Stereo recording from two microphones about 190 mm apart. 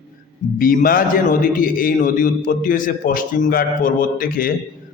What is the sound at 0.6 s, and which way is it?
A man's voice, 50° left (ahead or behind).